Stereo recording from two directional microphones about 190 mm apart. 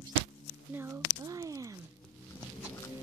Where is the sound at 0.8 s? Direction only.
20° right (ahead or behind).